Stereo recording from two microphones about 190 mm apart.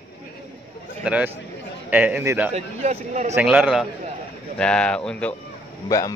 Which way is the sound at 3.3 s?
5° right (ahead or behind).